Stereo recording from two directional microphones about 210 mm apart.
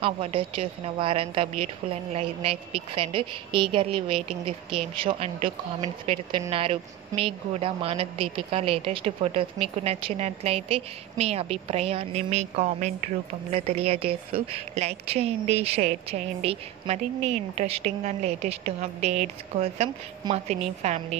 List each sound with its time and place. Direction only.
0.0 s speech: 25° right (ahead or behind)